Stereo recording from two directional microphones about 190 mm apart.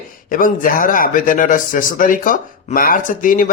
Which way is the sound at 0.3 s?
45° left (ahead or behind).